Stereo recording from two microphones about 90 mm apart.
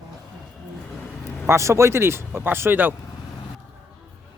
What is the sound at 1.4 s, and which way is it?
Speech, 30° right (ahead or behind).